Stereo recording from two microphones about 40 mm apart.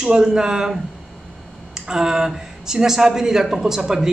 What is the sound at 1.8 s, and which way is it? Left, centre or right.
A woman's voice, centre.